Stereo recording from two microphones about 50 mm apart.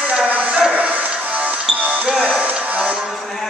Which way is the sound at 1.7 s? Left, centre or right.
Right.